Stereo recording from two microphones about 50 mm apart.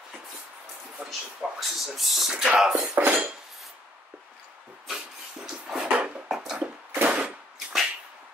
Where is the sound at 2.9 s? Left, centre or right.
Right.